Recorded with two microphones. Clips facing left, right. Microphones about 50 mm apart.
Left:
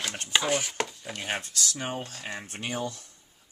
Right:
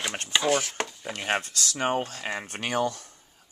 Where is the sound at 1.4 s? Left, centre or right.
Right.